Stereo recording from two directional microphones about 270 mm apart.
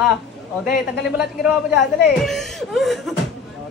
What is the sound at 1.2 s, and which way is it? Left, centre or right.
Speech, centre.